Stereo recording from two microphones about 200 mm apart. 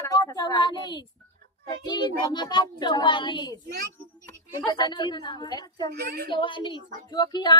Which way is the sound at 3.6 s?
55° right (ahead or behind).